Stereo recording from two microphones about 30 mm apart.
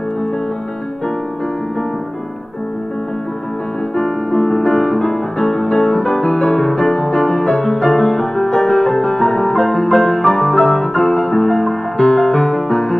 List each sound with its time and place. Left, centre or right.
3.9 s music: left
4.4 s music: centre
4.6 s music: left